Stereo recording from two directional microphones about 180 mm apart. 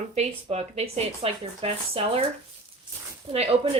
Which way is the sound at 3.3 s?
35° right (ahead or behind).